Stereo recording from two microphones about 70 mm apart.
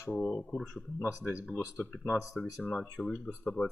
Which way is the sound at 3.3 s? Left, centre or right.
Centre.